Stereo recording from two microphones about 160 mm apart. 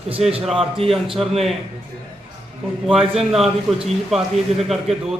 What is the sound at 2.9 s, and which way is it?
A man's voice, centre (ahead or behind).